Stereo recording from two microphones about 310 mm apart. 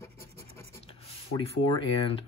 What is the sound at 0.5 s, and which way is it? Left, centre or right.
Writing, centre.